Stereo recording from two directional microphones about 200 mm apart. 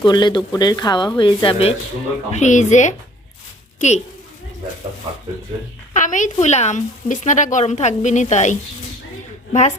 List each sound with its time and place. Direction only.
0.0 s a woman's voice: 20° left (ahead or behind)
5.9 s a woman's voice: 40° left (ahead or behind)